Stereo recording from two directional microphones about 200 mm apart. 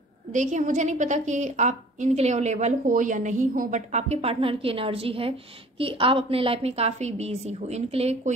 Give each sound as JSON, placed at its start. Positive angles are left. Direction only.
{"t": 0.3, "sound": "a woman's voice", "side_deg": -40}